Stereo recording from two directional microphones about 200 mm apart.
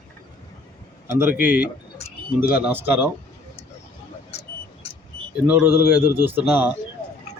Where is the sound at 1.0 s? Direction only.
10° right (ahead or behind).